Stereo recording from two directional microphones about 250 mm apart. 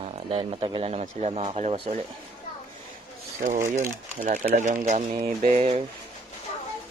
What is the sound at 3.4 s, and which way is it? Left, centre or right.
Speech, right.